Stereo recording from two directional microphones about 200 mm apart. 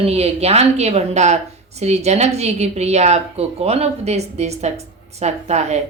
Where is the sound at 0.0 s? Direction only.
30° right (ahead or behind).